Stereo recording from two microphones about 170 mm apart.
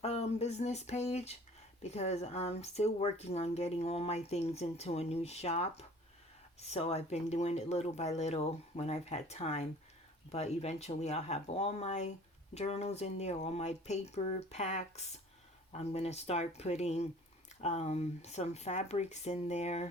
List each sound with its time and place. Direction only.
0.0 s speech: 40° left (ahead or behind)